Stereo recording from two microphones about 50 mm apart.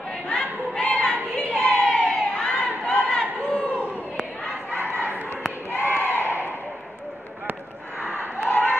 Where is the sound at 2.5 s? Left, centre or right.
Left.